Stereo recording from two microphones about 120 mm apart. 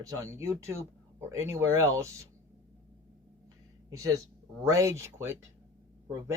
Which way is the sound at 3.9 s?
30° right (ahead or behind).